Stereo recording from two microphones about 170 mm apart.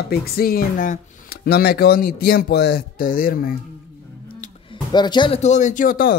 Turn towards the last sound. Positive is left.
turn(degrees=55)  # may be behind; listen again after turning